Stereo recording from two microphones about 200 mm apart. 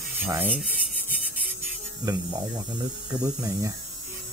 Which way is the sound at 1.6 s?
15° right (ahead or behind).